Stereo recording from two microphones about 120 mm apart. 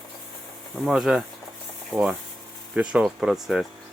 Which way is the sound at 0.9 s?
5° right (ahead or behind).